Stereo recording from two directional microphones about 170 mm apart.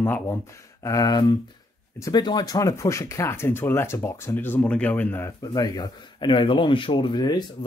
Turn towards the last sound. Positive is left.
turn(degrees=25)  # may be behind; listen again after turning